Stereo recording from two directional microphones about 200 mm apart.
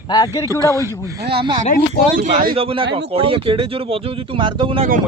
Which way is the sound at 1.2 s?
55° right (ahead or behind).